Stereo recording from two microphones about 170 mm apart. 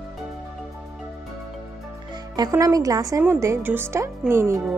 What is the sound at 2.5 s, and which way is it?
A woman's voice, 20° right (ahead or behind).